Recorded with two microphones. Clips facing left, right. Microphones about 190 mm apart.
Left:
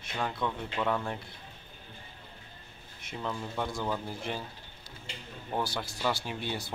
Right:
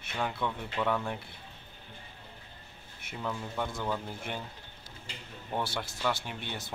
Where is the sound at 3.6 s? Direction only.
10° left (ahead or behind).